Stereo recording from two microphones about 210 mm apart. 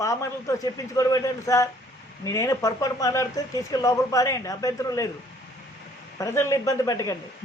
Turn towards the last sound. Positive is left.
turn(degrees=15)  # may be behind; listen again after turning